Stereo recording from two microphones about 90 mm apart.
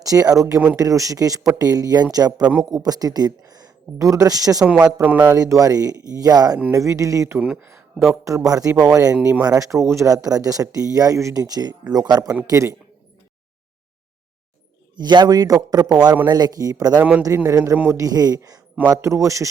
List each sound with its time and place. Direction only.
0.0 s speech: 40° right (ahead or behind)
4.9 s a man's voice: 20° right (ahead or behind)
5.2 s speech: 35° right (ahead or behind)
7.6 s a sound: 30° right (ahead or behind)
8.1 s speech: 35° right (ahead or behind)
12.5 s speech: 30° right (ahead or behind)
14.9 s speech: 50° right (ahead or behind)
17.0 s a man's voice: 15° right (ahead or behind)
17.2 s a man's voice: 30° right (ahead or behind); by 18.6 s 45° right (ahead or behind)
19.0 s speech: 35° right (ahead or behind)